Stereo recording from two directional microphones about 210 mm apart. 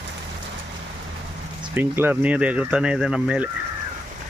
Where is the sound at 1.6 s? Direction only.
10° right (ahead or behind).